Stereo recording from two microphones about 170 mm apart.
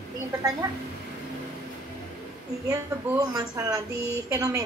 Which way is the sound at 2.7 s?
20° right (ahead or behind).